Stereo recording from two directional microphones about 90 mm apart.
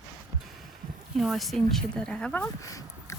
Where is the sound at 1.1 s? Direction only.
Centre (ahead or behind).